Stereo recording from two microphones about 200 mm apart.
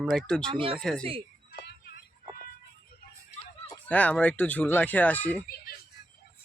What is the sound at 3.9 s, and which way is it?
Speech, 5° left (ahead or behind).